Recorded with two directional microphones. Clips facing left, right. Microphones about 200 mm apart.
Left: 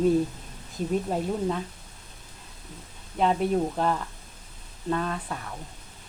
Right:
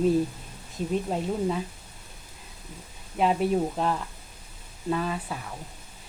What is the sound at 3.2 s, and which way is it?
Speech, 5° right (ahead or behind).